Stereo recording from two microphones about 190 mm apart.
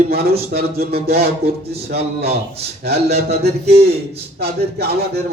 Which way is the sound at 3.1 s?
35° right (ahead or behind).